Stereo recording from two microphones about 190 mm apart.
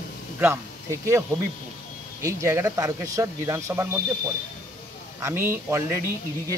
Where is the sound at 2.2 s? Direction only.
15° right (ahead or behind).